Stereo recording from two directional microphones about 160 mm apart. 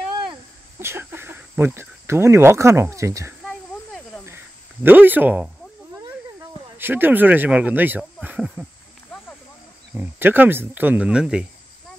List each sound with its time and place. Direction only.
0.7 s speech: 15° right (ahead or behind)
3.4 s snake: centre (ahead or behind)
4.8 s speech: 10° right (ahead or behind)
6.8 s speech: 10° right (ahead or behind)
9.1 s a sound: 5° left (ahead or behind)
9.9 s speech: 10° right (ahead or behind)